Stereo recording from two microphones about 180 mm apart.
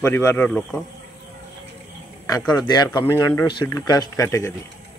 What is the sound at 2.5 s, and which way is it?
Speech, 25° left (ahead or behind).